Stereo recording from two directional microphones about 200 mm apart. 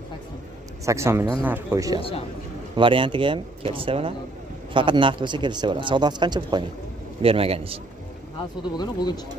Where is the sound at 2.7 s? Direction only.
25° right (ahead or behind).